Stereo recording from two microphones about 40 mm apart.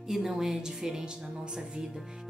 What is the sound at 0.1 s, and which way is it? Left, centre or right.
Speech, centre.